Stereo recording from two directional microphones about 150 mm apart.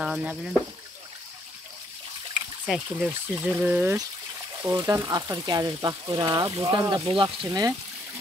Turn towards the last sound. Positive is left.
turn(degrees=-25)  # may be behind; listen again after turning